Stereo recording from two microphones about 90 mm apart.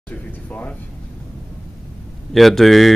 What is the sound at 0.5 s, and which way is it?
Speech, 15° left (ahead or behind).